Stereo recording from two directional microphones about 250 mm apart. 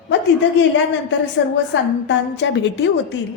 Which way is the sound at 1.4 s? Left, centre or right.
Left.